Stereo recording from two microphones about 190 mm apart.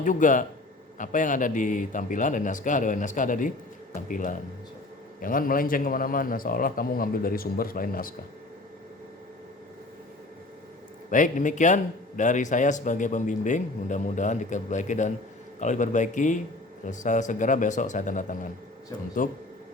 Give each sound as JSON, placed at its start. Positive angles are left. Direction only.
{"t": 0.0, "sound": "a man's voice", "side_deg": 45}
{"t": 11.1, "sound": "a man's voice", "side_deg": 40}